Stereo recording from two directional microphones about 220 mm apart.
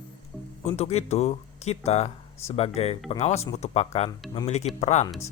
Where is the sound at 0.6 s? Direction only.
30° left (ahead or behind).